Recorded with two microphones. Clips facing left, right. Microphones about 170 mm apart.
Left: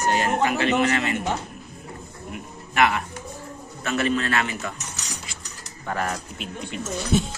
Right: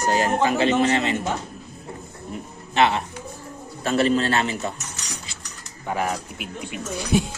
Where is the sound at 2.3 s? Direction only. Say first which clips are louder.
Right 3 dB; 30° right (ahead or behind).